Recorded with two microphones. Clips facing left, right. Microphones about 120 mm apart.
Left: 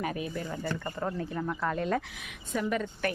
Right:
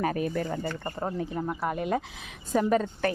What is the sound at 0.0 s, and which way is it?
Speech, 45° right (ahead or behind).